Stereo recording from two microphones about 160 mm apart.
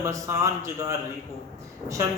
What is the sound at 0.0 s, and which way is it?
Speech, 20° right (ahead or behind).